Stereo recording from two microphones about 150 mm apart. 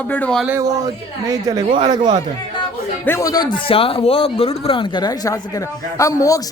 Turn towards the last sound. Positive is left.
turn(degrees=20)  # may be behind; listen again after turning